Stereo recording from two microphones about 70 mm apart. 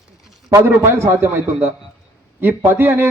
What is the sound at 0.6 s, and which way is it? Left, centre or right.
A man's voice, right.